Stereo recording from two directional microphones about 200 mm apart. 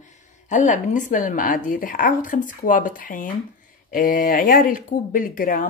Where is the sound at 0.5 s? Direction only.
40° left (ahead or behind).